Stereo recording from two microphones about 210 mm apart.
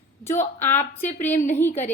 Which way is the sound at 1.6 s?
10° left (ahead or behind).